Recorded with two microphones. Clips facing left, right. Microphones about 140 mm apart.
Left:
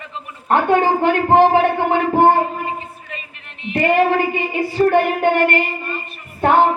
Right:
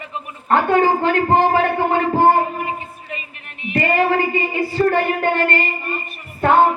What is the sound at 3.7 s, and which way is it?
A woman's voice, 20° left (ahead or behind).